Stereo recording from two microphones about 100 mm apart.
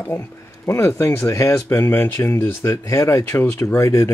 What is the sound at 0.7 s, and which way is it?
Speech, 25° left (ahead or behind).